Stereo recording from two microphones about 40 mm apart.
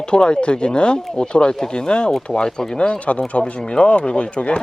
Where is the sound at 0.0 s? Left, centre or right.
Left.